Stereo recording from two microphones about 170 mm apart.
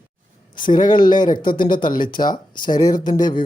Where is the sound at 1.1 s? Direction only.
25° left (ahead or behind).